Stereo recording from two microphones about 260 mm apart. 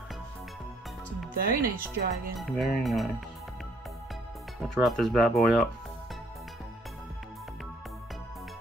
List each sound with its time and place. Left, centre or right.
1.3 s speech: right
2.4 s speech: centre
4.6 s speech: centre